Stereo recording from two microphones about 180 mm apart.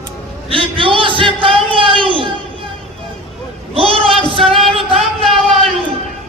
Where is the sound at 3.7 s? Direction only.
30° right (ahead or behind).